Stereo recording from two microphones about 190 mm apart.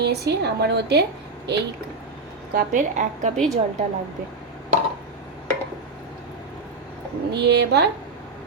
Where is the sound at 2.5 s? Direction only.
40° right (ahead or behind).